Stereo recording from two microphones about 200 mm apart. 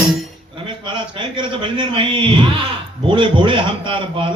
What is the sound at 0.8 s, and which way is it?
Speech, 25° right (ahead or behind).